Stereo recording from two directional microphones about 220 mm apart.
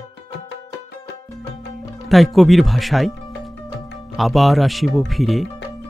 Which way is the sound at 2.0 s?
Centre (ahead or behind).